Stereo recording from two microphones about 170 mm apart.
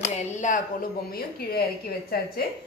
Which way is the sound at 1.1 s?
60° left (ahead or behind).